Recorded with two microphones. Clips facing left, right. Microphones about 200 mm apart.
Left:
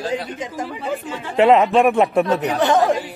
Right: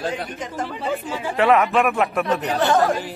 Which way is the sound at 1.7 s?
30° left (ahead or behind).